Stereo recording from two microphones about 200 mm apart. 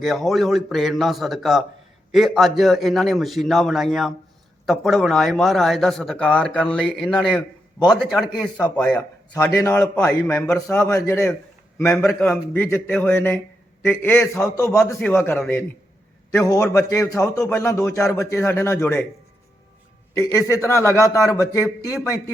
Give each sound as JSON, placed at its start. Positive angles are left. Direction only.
{"t": 0.0, "sound": "a man's voice", "side_deg": 0}
{"t": 20.6, "sound": "a man's voice", "side_deg": 15}